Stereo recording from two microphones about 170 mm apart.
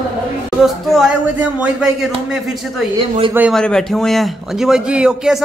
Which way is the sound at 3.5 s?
5° left (ahead or behind).